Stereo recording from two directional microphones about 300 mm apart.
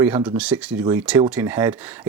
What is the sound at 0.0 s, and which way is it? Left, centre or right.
Speech, centre.